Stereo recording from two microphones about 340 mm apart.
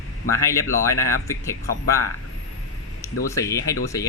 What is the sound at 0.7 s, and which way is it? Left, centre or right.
Speech, centre.